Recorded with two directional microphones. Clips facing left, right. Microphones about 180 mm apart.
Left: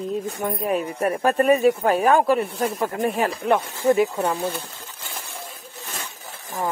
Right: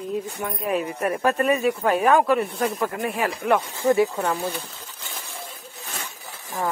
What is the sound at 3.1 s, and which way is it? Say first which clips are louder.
Speech: left 1 dB; 25° left (ahead or behind).